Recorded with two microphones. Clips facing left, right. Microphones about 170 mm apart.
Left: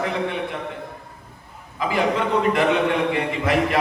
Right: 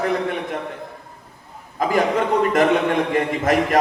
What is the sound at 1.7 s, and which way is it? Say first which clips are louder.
A man's voice: right 3 dB; 45° right (ahead or behind).